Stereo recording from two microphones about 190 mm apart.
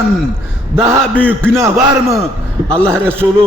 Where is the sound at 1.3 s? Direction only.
15° right (ahead or behind).